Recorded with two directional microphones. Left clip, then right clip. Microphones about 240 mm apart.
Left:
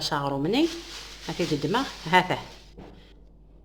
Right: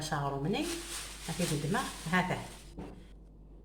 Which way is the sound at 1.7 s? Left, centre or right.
Left.